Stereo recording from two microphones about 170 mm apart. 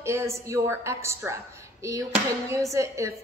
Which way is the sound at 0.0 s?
15° right (ahead or behind).